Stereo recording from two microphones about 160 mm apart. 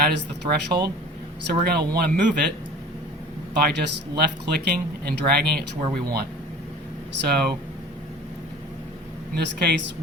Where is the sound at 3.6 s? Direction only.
90° right.